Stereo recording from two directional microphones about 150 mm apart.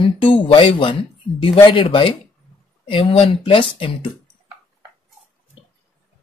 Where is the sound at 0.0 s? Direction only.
35° left (ahead or behind).